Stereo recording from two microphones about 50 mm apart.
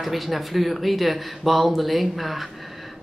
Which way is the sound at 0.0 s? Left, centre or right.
Centre.